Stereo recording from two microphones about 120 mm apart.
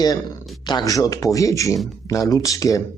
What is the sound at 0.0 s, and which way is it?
A man's voice, 30° left (ahead or behind).